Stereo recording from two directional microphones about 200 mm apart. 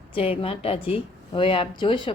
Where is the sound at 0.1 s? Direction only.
30° left (ahead or behind).